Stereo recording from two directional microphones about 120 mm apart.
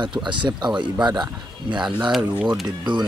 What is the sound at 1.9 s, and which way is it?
Speech, 10° right (ahead or behind).